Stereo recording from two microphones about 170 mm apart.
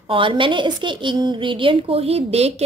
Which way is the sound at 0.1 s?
30° right (ahead or behind).